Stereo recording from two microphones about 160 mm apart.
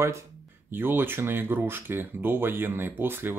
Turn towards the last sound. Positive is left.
turn(degrees=-15)  # may be behind; listen again after turning